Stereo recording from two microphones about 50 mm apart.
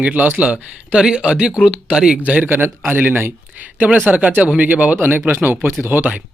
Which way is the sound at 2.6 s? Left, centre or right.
Right.